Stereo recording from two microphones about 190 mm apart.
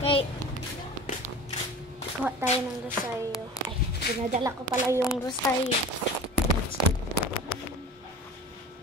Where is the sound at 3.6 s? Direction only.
20° left (ahead or behind).